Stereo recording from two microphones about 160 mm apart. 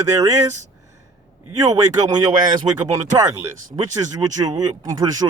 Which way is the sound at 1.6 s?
25° right (ahead or behind).